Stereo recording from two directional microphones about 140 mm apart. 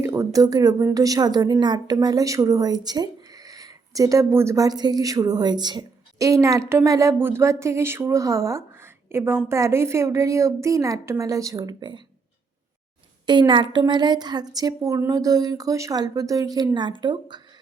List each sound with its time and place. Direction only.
0.0 s a woman's voice: 20° right (ahead or behind)
13.2 s a woman's voice: 30° right (ahead or behind)